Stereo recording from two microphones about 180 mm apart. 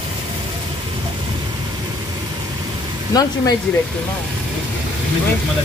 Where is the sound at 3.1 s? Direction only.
20° left (ahead or behind).